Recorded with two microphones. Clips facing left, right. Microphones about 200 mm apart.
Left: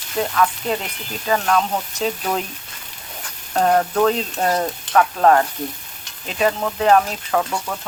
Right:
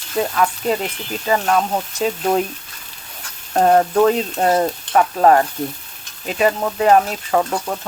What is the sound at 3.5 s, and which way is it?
Stir, 15° right (ahead or behind).